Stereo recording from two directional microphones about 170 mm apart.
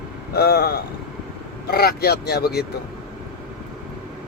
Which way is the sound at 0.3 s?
65° left (ahead or behind).